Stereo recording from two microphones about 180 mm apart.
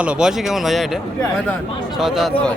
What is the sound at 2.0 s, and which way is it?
Speech, centre (ahead or behind).